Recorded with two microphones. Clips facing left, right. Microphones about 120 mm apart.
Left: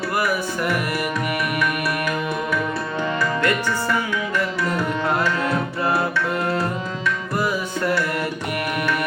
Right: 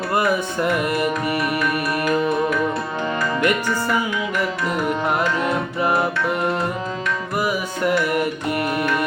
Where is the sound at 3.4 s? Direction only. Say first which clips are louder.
Right 1 dB; 15° right (ahead or behind).